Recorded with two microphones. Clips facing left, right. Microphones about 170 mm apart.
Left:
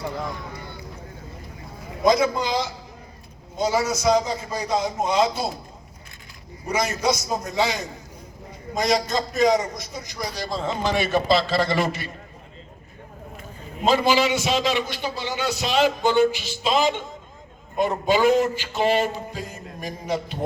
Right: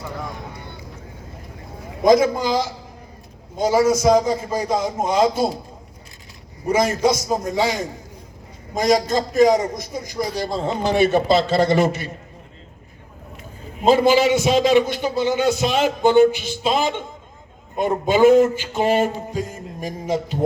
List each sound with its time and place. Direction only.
2.0 s a man's voice: 50° right (ahead or behind)
6.7 s a man's voice: 50° right (ahead or behind)
13.8 s a man's voice: 50° right (ahead or behind)